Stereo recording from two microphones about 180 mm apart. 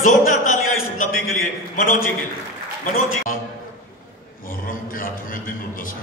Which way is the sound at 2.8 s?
45° left (ahead or behind).